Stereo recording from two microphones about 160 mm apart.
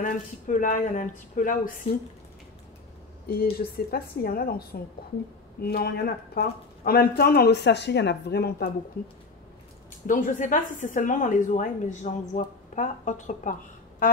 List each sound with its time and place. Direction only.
0.0 s speech: 55° left (ahead or behind)
3.3 s speech: 70° left (ahead or behind); by 8.6 s 85° left
10.0 s a woman's voice: 55° left (ahead or behind)